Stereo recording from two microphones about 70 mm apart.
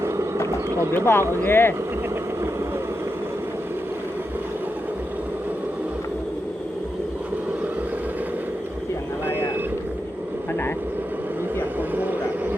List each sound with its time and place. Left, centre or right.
0.9 s speech: left